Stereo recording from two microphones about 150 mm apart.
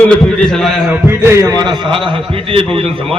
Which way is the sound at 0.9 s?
15° right (ahead or behind).